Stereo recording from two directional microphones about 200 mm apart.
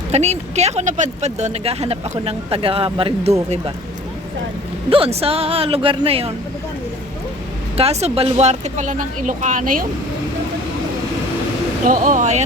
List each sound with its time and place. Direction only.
0.1 s speech: 35° right (ahead or behind)
4.9 s speech: 30° right (ahead or behind)
7.8 s speech: 30° right (ahead or behind)
11.9 s speech: 40° right (ahead or behind)